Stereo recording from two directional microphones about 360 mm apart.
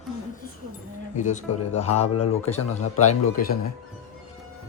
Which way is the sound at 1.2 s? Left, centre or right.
Centre.